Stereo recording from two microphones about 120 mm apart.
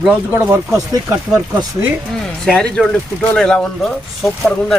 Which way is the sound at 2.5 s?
5° left (ahead or behind).